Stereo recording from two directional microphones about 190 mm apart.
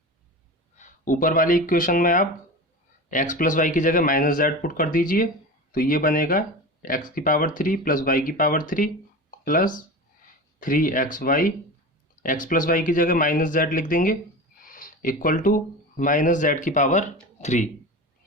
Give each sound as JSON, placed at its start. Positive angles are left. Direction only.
{"t": 0.8, "sound": "speech", "side_deg": 45}